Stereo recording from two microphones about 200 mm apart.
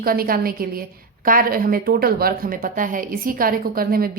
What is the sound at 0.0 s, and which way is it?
A woman's voice, 45° right (ahead or behind).